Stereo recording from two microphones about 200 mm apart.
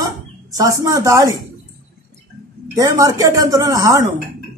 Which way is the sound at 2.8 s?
15° right (ahead or behind).